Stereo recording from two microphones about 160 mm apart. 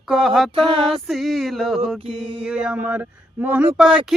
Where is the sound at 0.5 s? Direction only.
35° right (ahead or behind).